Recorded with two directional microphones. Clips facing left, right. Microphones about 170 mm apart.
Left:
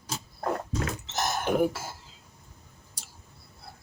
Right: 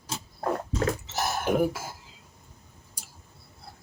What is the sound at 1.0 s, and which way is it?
Cough, 5° right (ahead or behind).